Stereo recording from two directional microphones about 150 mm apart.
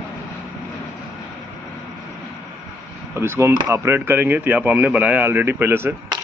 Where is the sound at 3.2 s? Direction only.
15° right (ahead or behind).